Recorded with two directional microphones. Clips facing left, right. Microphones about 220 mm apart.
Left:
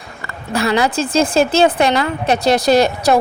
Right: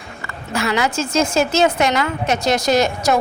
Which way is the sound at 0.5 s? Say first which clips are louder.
Left 4 dB; 35° left (ahead or behind).